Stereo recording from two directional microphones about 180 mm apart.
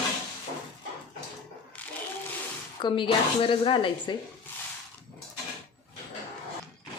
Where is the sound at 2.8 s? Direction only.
25° left (ahead or behind).